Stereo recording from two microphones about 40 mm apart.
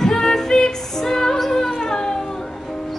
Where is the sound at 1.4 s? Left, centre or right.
Centre.